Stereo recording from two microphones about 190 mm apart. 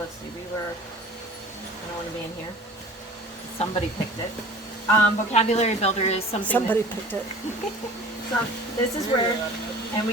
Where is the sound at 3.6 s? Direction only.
30° left (ahead or behind).